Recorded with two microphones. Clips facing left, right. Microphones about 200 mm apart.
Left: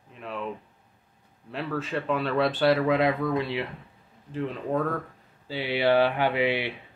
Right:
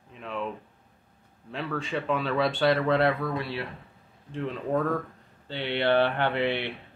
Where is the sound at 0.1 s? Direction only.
Centre (ahead or behind).